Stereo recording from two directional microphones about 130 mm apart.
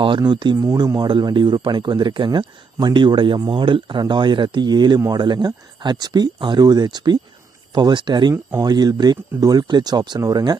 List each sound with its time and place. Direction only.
0.0 s speech: 35° right (ahead or behind)